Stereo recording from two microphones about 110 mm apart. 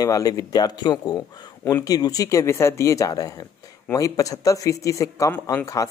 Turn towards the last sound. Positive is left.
turn(degrees=30)  # may be behind; listen again after turning